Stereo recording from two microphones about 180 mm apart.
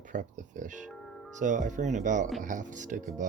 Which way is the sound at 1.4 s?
45° right (ahead or behind).